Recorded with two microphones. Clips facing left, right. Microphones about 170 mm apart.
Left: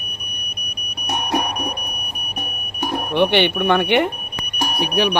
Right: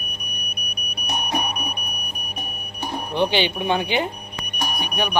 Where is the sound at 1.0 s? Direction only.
85° left.